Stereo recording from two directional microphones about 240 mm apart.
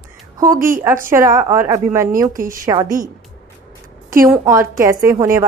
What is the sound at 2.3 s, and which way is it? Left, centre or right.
Speech, right.